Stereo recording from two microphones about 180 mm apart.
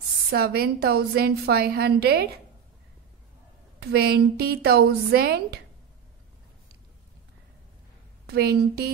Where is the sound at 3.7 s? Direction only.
60° right (ahead or behind).